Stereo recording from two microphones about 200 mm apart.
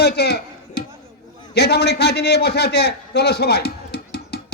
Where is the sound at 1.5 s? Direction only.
55° left (ahead or behind).